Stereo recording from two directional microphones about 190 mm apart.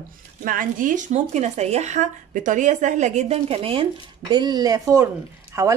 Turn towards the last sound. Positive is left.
turn(degrees=-15)  # may be behind; listen again after turning